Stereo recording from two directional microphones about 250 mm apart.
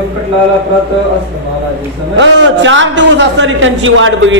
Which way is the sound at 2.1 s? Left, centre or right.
Right.